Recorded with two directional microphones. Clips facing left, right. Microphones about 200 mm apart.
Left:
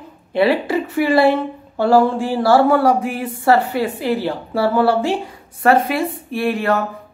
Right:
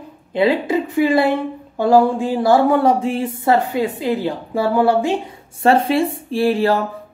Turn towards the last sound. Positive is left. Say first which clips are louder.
# right 2 dB
turn(degrees=-30)  # may be behind; listen again after turning